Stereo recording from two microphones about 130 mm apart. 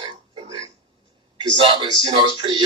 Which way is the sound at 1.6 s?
40° right (ahead or behind).